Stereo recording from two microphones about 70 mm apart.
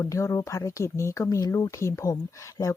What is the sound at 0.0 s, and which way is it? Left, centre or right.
Speech, left.